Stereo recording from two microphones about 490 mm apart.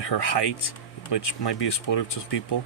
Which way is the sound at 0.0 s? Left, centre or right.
Left.